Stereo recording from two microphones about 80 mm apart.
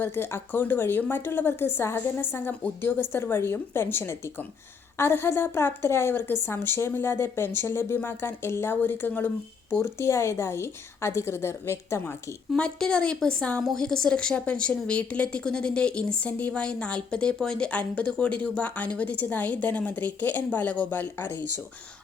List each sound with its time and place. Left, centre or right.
0.0 s a woman's voice: left
12.5 s a woman's voice: centre